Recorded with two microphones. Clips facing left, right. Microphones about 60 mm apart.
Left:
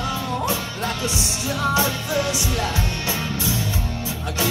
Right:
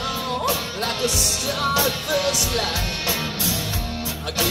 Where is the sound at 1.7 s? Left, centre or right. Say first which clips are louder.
Even; left.